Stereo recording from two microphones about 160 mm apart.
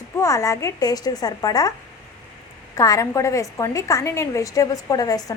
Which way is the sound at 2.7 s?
20° left (ahead or behind).